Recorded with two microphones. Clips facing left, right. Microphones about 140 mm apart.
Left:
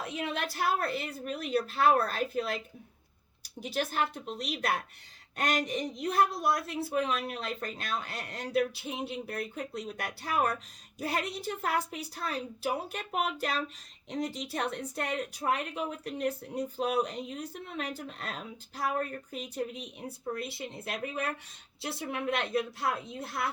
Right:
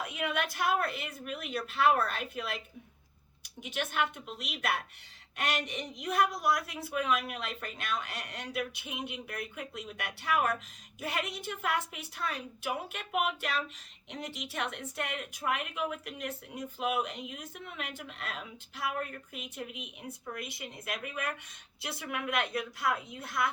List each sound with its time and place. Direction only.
0.0 s a woman's voice: 30° left (ahead or behind)